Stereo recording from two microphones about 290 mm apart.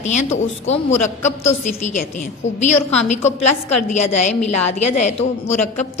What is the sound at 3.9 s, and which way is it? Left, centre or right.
A woman's voice, left.